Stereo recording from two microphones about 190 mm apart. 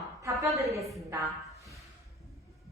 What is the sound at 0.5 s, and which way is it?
Speech, 15° right (ahead or behind).